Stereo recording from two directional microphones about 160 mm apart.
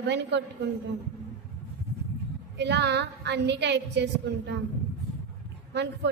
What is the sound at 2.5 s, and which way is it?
A woman's voice, 90° right.